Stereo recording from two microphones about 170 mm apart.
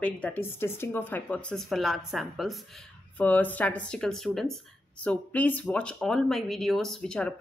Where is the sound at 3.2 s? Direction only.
10° left (ahead or behind).